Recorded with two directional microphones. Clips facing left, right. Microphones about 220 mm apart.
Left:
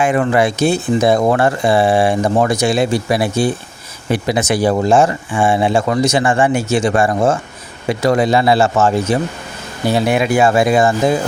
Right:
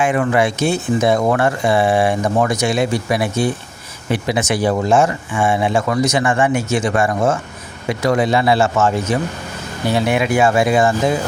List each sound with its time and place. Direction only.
0.0 s speech: 35° left (ahead or behind)